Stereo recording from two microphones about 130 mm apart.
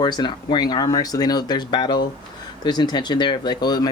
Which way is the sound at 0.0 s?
35° left (ahead or behind).